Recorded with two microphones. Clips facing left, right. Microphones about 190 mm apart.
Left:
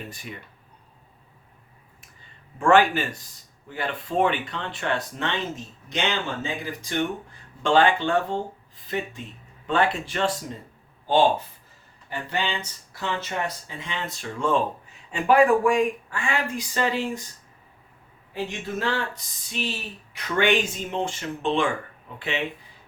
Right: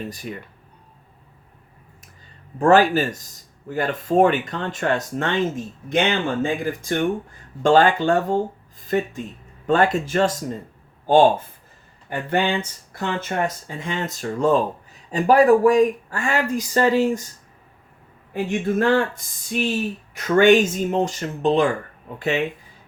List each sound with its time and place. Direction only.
0.1 s speech: 40° right (ahead or behind)
2.6 s speech: 40° right (ahead or behind)
18.3 s speech: 55° right (ahead or behind)